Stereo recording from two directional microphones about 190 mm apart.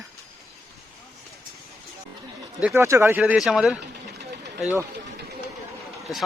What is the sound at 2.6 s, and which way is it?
Speech, 10° right (ahead or behind).